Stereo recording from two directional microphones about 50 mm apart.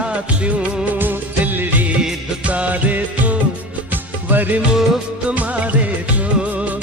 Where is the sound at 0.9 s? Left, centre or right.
Right.